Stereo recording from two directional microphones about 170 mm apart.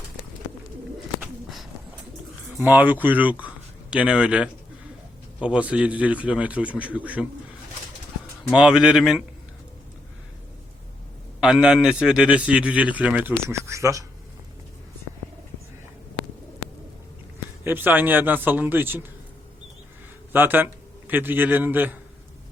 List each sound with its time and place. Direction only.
1.2 s a sound: centre (ahead or behind)
2.6 s a man's voice: 10° right (ahead or behind)
8.5 s a man's voice: 5° right (ahead or behind)
11.3 s a man's voice: 5° right (ahead or behind)
17.6 s a man's voice: 15° right (ahead or behind)
20.3 s a man's voice: 10° right (ahead or behind)